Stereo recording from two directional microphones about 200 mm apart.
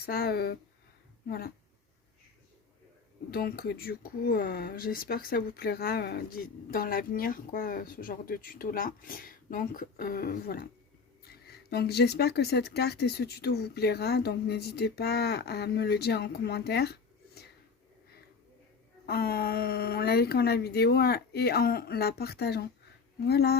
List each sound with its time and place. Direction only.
0.0 s speech: 50° left (ahead or behind)
3.3 s speech: 50° left (ahead or behind)
19.0 s speech: 50° left (ahead or behind)